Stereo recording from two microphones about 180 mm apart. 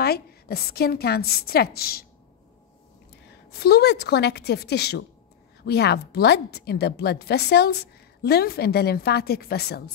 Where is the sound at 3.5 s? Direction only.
60° left (ahead or behind).